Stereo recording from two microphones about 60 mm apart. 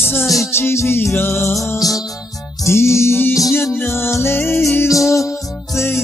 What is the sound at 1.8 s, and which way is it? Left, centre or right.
Music, left.